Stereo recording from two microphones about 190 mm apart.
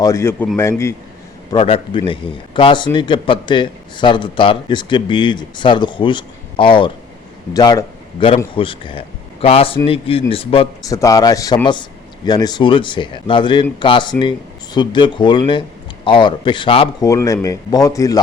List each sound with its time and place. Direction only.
0.0 s speech: 15° left (ahead or behind)
1.5 s a man's voice: 30° left (ahead or behind)
10.8 s a man's voice: 20° left (ahead or behind)
17.1 s speech: 15° left (ahead or behind)